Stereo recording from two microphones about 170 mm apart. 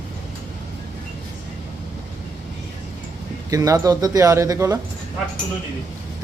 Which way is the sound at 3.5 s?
20° right (ahead or behind).